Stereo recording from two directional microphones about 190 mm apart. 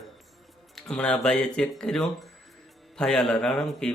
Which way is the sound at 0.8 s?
5° left (ahead or behind).